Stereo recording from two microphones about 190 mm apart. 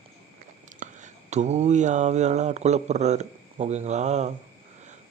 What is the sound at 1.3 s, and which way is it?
A man's voice, 35° right (ahead or behind).